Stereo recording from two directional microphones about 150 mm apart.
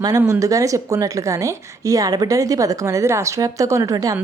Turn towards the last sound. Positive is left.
turn(degrees=-20)  # may be behind; listen again after turning